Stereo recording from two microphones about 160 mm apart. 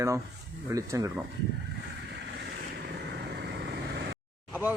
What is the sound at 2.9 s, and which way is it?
Vehicle, 90° right.